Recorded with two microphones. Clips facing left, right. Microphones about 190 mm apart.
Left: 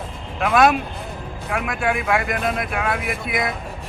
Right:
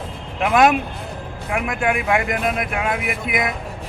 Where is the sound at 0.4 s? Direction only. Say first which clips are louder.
Right 1 dB; 20° right (ahead or behind).